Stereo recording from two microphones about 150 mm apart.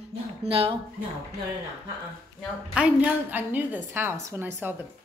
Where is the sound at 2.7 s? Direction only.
10° right (ahead or behind).